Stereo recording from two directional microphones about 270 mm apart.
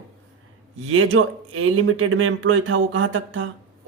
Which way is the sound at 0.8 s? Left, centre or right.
Right.